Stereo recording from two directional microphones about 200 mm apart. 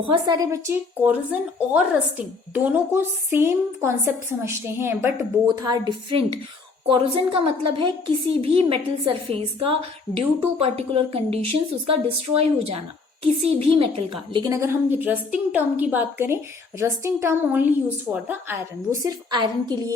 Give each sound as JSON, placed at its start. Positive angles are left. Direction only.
{"t": 0.0, "sound": "a woman's voice", "side_deg": -20}